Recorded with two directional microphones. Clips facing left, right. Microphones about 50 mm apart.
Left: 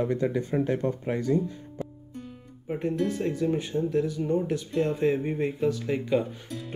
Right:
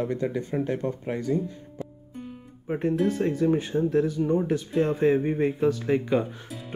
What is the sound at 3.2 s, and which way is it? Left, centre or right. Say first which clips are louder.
Speech: right 3 dB; right.